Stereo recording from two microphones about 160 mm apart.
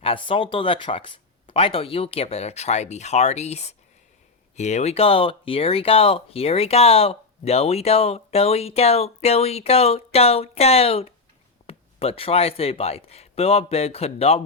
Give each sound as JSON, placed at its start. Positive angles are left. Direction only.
{"t": 0.0, "sound": "speech", "side_deg": 35}